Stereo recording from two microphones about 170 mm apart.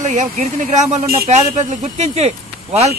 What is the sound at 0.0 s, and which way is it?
Speech, 45° right (ahead or behind).